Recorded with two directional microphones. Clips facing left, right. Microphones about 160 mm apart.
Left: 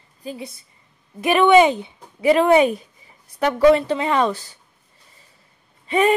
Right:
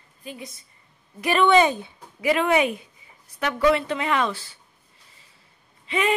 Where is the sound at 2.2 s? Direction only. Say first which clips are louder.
Left 6 dB; 35° left (ahead or behind).